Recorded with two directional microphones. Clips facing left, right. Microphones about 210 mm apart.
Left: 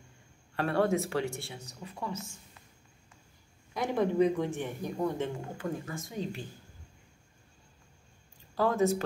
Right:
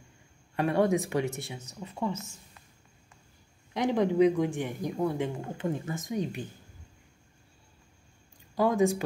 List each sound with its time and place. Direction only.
0.6 s speech: 15° right (ahead or behind)
3.7 s speech: 15° right (ahead or behind)
8.5 s speech: 15° right (ahead or behind)